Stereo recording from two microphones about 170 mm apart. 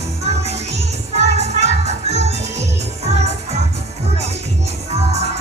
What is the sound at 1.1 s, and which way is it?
Music, 40° right (ahead or behind).